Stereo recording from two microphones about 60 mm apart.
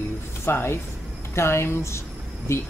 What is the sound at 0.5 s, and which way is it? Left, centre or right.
Speech, left.